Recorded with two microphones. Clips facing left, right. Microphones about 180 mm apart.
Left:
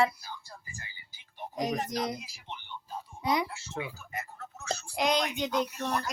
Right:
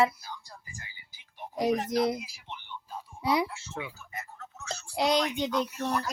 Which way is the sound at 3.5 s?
Centre (ahead or behind).